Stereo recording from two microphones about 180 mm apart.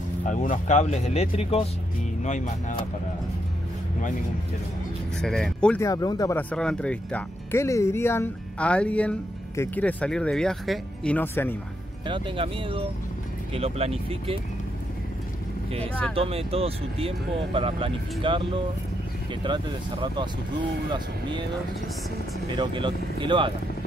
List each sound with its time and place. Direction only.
0.2 s speech: 45° left (ahead or behind)
5.2 s speech: 5° left (ahead or behind)
5.8 s speech: 20° left (ahead or behind)
6.5 s speech: 5° left (ahead or behind)
12.1 s speech: 30° right (ahead or behind)
15.8 s speech: 5° left (ahead or behind)
16.2 s speech: 35° right (ahead or behind)
22.5 s speech: 25° right (ahead or behind)